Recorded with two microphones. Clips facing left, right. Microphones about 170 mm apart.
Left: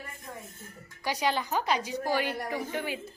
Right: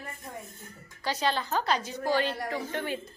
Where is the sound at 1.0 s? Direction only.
15° left (ahead or behind).